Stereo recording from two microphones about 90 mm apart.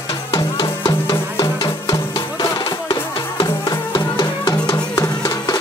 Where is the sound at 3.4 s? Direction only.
60° left (ahead or behind).